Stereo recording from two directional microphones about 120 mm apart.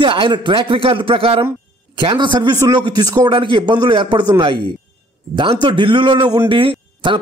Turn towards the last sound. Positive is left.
turn(degrees=-45)  # may be behind; listen again after turning